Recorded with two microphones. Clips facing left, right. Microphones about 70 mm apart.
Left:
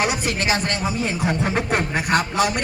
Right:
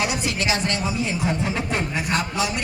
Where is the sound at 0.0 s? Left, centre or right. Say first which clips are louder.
Left 2 dB; left.